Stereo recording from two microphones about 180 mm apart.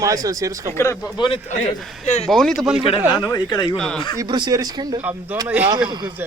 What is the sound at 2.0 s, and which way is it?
Speech, 40° left (ahead or behind).